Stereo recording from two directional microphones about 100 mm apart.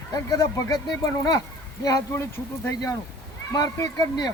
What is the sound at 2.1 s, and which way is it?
Speech, 25° left (ahead or behind).